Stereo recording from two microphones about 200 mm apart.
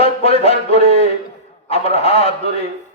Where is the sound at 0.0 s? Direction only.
30° left (ahead or behind).